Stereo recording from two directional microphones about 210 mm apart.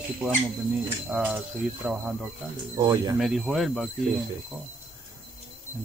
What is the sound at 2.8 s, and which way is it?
Speech, 20° right (ahead or behind).